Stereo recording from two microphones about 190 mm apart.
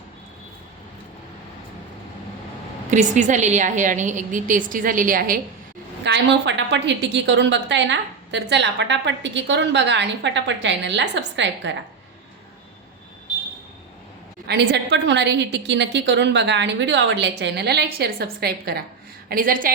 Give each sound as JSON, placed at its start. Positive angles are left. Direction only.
{"t": 2.9, "sound": "a woman's voice", "side_deg": -40}
{"t": 6.0, "sound": "a woman's voice", "side_deg": -65}
{"t": 14.4, "sound": "a woman's voice", "side_deg": -60}